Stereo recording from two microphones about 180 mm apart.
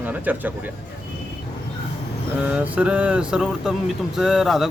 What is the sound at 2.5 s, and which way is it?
Speech, 5° right (ahead or behind).